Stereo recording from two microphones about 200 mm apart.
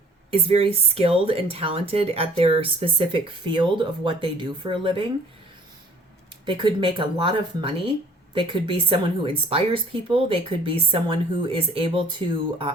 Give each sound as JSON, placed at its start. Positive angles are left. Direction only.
{"t": 0.3, "sound": "speech", "side_deg": -30}
{"t": 6.4, "sound": "speech", "side_deg": -25}